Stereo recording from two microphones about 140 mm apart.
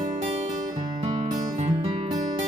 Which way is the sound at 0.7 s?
25° right (ahead or behind).